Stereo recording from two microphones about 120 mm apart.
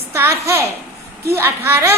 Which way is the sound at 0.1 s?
25° right (ahead or behind).